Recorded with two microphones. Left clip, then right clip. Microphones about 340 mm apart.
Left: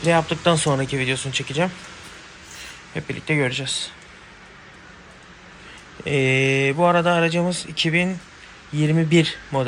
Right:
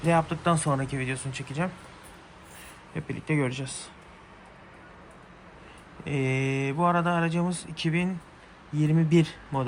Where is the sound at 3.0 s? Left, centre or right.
Centre.